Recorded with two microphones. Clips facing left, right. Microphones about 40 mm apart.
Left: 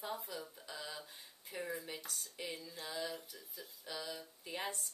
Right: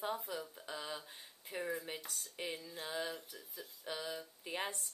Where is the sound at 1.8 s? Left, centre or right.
Right.